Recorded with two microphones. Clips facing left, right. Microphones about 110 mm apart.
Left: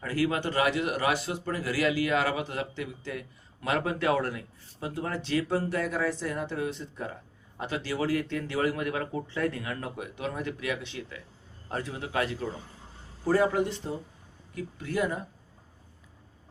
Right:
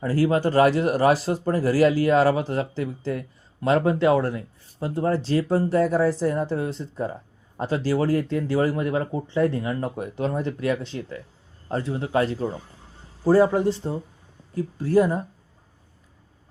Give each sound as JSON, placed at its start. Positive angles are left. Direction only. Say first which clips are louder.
{"t": 0.0, "sound": "a man's voice", "louder": "right 7 dB", "side_deg": -35}